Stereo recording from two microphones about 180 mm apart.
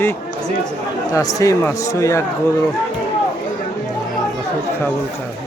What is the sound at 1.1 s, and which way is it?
Speech, 20° left (ahead or behind).